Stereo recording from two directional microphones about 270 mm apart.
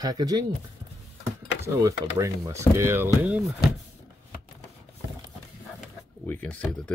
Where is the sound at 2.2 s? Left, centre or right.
Centre.